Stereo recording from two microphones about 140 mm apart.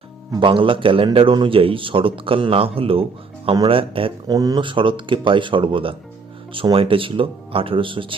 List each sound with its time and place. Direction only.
0.3 s a man's voice: 35° right (ahead or behind)
4.3 s a man's voice: 25° right (ahead or behind)